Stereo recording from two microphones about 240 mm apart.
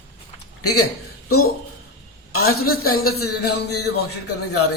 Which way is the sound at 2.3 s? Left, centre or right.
Left.